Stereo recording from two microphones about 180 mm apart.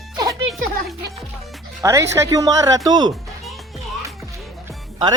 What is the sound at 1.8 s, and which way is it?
Speech, 15° right (ahead or behind).